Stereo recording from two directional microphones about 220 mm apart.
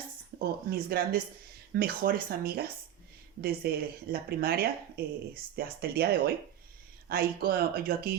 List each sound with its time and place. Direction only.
0.7 s speech: 45° right (ahead or behind)